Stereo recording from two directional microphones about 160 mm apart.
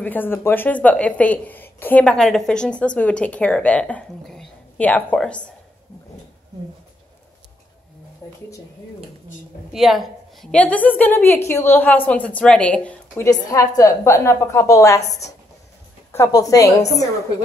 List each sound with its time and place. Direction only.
0.0 s a woman's voice: 10° left (ahead or behind)
8.2 s speech: 20° left (ahead or behind)
9.7 s a woman's voice: centre (ahead or behind)
13.3 s a woman's voice: 20° left (ahead or behind)
15.0 s a woman's voice: 45° left (ahead or behind)
16.1 s a woman's voice: 20° left (ahead or behind)